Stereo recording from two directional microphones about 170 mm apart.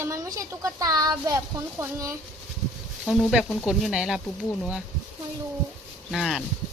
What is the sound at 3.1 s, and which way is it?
Speech, centre (ahead or behind).